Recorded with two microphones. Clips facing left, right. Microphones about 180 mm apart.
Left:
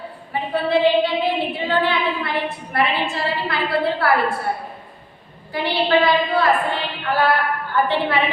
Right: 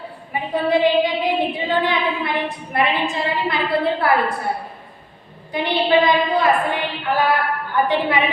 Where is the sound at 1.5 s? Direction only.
15° right (ahead or behind).